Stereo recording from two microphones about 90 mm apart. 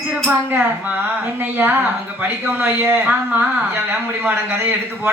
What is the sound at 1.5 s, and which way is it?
A woman's voice, 25° right (ahead or behind).